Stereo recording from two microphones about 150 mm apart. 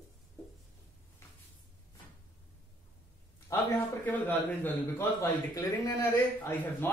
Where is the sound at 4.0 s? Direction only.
10° left (ahead or behind).